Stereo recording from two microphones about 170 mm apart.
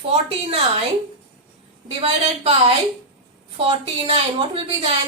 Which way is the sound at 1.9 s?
35° right (ahead or behind).